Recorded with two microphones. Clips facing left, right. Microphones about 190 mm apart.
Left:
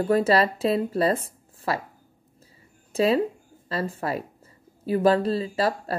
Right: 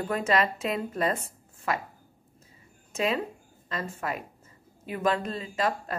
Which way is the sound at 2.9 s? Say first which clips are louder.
Left 7 dB; 35° left (ahead or behind).